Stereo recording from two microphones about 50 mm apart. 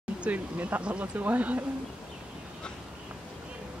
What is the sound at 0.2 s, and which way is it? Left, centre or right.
Speech, right.